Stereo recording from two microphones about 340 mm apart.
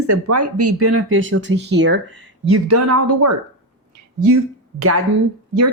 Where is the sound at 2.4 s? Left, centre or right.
Right.